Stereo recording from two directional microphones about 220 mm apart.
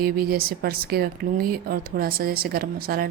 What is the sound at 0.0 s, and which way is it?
Speech, 45° right (ahead or behind).